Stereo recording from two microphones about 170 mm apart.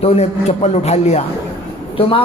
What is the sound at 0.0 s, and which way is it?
A man's voice, 40° left (ahead or behind).